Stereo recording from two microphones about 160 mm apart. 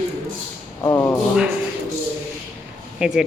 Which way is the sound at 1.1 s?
5° right (ahead or behind).